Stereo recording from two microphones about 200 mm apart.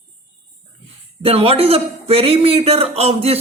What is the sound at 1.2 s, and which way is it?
A man's voice, 30° right (ahead or behind).